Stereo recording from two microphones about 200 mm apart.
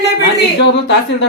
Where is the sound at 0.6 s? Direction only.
60° left (ahead or behind).